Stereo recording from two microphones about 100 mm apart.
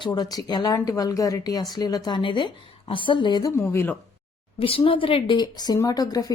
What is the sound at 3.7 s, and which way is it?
Speech, 25° left (ahead or behind).